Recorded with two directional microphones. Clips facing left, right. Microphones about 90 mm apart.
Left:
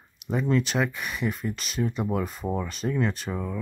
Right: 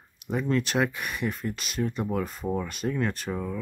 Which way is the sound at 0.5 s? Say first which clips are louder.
Even; centre (ahead or behind).